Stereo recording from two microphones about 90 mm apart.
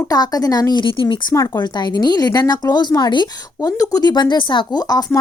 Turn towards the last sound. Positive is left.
turn(degrees=45)  # may be behind; listen again after turning